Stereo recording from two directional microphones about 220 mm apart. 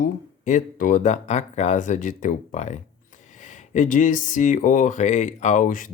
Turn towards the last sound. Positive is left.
turn(degrees=35)  # may be behind; listen again after turning